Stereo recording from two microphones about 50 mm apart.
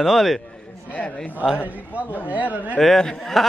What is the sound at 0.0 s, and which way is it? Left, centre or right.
Speech, centre.